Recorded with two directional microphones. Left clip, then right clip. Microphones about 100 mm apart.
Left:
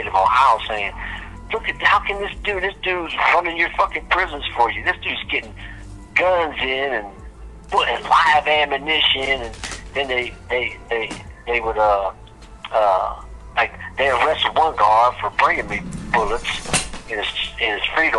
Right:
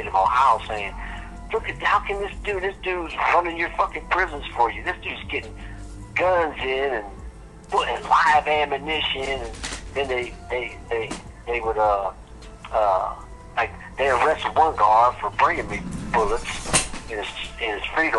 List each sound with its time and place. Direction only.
0.0 s speech: 45° left (ahead or behind)
14.0 s speech: 35° left (ahead or behind)